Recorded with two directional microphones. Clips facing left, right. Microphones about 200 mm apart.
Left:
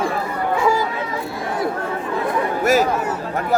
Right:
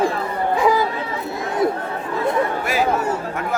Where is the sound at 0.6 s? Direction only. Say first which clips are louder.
Right 2 dB; 15° right (ahead or behind).